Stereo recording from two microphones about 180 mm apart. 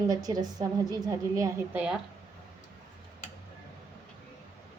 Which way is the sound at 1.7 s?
10° right (ahead or behind).